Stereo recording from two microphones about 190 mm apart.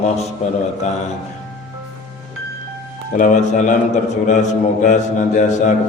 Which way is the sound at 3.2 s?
40° left (ahead or behind).